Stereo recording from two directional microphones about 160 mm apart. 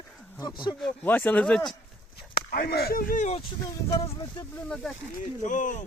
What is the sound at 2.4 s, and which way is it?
Speech, 85° left.